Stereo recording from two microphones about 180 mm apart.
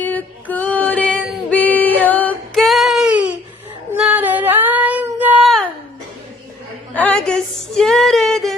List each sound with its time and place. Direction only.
0.0 s female singing: 10° left (ahead or behind); by 3.3 s 5° right (ahead or behind)
3.9 s child singing: 10° right (ahead or behind)
6.9 s a sound: 10° left (ahead or behind)